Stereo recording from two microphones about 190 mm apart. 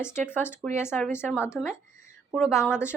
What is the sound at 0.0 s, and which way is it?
Speech, 10° left (ahead or behind).